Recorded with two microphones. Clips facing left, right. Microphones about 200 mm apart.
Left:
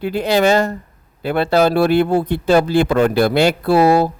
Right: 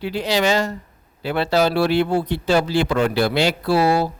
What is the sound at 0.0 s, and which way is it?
A man's voice, 55° left (ahead or behind).